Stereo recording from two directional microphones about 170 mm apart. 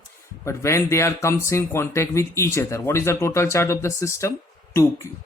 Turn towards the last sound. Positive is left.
turn(degrees=15)  # may be behind; listen again after turning